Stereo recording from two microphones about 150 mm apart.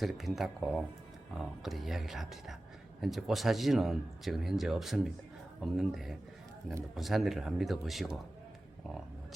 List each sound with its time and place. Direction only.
0.0 s speech: centre (ahead or behind)